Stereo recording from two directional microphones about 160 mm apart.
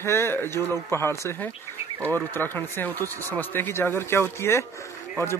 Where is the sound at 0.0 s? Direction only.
15° left (ahead or behind).